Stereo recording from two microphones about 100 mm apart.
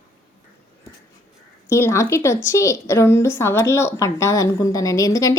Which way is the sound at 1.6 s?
25° left (ahead or behind).